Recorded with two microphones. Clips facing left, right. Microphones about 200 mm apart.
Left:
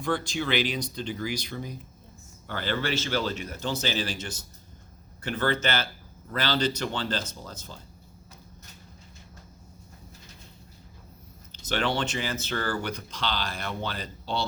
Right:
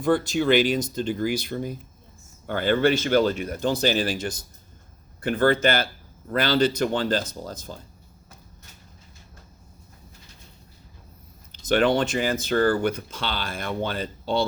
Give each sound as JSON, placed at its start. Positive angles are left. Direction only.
{"t": 0.0, "sound": "speech", "side_deg": -50}
{"t": 11.9, "sound": "speech", "side_deg": -50}